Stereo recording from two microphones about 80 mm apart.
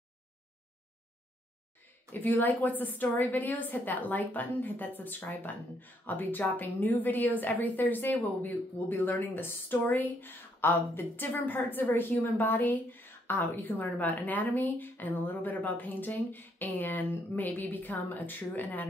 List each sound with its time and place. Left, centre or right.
2.1 s a woman's voice: left